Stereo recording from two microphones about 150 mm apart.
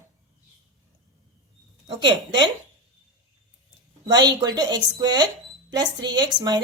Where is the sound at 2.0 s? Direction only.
30° right (ahead or behind).